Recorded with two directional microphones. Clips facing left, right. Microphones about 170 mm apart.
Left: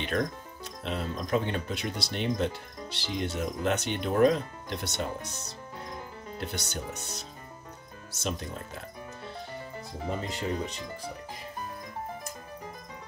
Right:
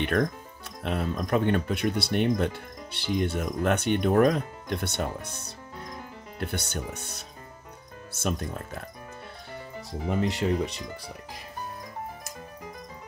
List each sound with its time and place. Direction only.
0.8 s speech: 55° right (ahead or behind)
10.0 s speech: 80° right